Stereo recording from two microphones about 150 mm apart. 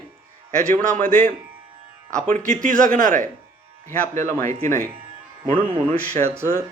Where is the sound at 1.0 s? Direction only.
60° right (ahead or behind).